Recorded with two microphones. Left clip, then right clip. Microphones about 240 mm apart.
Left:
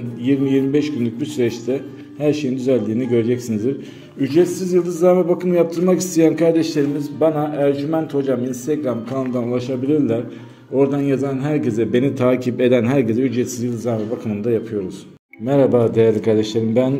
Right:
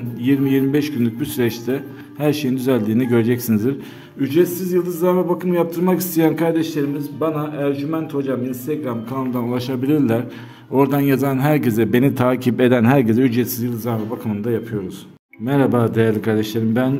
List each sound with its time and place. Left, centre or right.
0.2 s a man's voice: right
4.2 s a man's voice: centre
9.3 s a man's voice: right
15.8 s a man's voice: centre